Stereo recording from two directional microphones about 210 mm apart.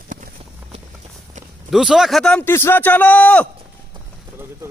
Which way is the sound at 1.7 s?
Centre (ahead or behind).